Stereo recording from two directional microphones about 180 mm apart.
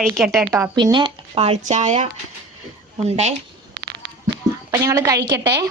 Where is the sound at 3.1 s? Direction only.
40° right (ahead or behind).